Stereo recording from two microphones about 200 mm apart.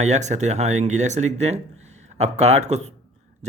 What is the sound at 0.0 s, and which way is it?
Speech, 35° right (ahead or behind).